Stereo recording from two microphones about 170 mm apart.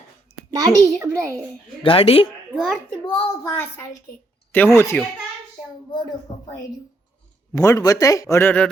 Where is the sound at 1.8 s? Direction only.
35° left (ahead or behind).